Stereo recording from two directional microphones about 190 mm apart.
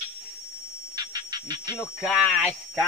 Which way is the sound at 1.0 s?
20° right (ahead or behind).